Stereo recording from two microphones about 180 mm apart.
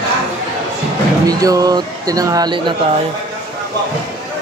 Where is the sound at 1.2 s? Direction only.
20° right (ahead or behind).